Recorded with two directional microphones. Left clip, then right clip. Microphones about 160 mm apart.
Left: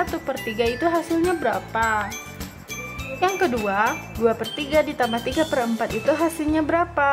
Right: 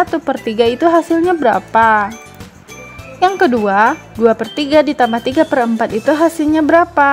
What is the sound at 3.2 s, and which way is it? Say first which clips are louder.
Speech: right 10 dB; 40° right (ahead or behind).